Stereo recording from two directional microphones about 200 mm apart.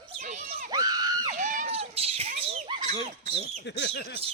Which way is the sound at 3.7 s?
60° left (ahead or behind).